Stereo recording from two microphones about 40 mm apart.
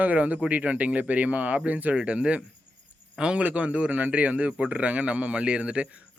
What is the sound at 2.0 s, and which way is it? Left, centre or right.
Speech, right.